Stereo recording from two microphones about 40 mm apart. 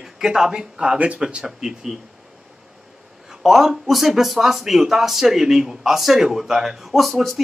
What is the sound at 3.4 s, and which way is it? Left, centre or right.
Speech, centre.